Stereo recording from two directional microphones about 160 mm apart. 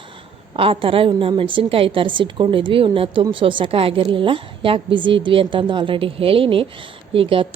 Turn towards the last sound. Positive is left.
turn(degrees=-35)  # may be behind; listen again after turning